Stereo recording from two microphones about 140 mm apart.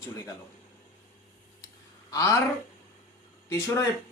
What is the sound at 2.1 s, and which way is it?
Speech, 25° left (ahead or behind).